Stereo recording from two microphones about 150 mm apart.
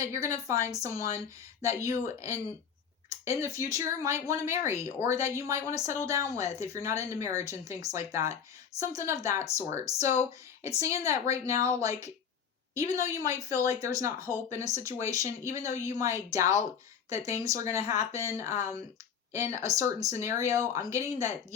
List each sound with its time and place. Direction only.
0.0 s speech: 20° right (ahead or behind)
10.8 s speech: 20° right (ahead or behind)
12.9 s speech: 20° right (ahead or behind)